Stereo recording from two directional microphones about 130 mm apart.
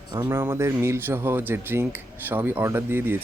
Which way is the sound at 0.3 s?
20° right (ahead or behind).